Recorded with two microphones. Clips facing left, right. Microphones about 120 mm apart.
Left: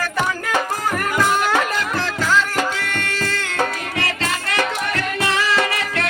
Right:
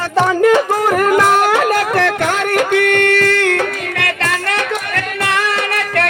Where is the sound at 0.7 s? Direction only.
65° right (ahead or behind).